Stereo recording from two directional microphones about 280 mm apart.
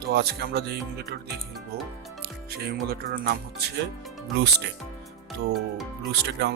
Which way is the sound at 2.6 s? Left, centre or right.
Right.